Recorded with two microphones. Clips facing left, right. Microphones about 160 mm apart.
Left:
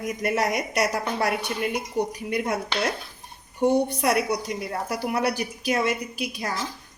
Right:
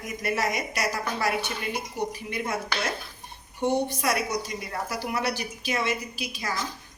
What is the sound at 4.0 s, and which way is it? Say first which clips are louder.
A woman's voice: left 4 dB; 65° left (ahead or behind).